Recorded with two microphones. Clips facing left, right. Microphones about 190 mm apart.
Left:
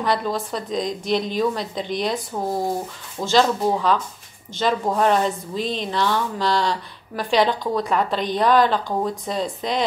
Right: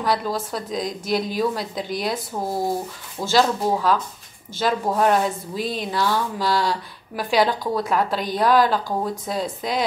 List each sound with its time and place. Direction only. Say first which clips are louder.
0.0 s speech: left 1 dB; 5° right (ahead or behind)